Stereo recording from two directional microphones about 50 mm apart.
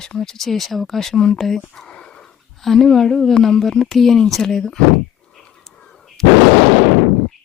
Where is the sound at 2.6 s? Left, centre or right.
Centre.